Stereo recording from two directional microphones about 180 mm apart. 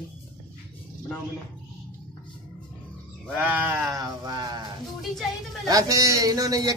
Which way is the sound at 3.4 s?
10° right (ahead or behind).